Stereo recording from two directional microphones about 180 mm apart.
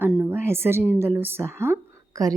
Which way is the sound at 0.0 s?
10° right (ahead or behind).